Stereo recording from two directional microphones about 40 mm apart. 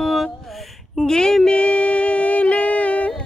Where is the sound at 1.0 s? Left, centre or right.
Centre.